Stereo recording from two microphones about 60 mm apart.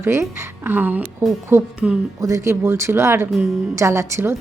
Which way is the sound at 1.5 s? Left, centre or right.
Right.